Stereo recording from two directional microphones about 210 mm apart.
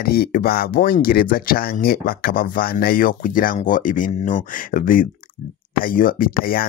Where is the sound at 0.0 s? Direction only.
45° left (ahead or behind).